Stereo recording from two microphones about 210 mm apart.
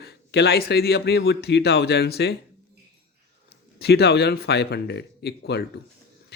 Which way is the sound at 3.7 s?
50° left (ahead or behind).